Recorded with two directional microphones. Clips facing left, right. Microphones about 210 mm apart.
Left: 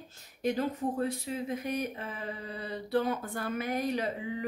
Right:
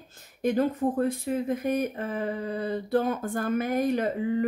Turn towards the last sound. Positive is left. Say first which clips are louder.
# right 8 dB
turn(degrees=-50)  # may be behind; listen again after turning